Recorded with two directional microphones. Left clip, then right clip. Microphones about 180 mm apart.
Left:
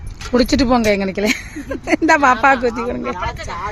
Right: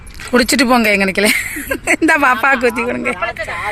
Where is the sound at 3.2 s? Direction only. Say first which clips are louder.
Right 4 dB; 65° left (ahead or behind).